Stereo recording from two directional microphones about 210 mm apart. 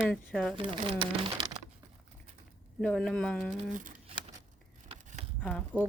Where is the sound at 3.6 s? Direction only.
35° right (ahead or behind).